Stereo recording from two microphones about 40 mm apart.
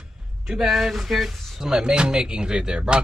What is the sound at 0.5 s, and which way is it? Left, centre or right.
Speech, centre.